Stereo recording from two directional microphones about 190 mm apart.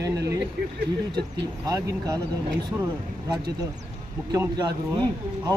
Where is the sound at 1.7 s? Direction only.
20° right (ahead or behind).